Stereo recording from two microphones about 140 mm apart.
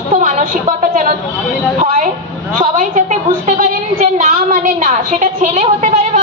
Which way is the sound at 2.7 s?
55° right (ahead or behind).